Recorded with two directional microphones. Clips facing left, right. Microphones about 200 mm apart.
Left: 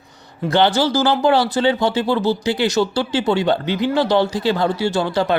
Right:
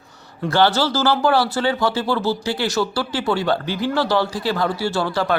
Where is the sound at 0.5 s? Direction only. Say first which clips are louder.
Left 2 dB; 15° left (ahead or behind).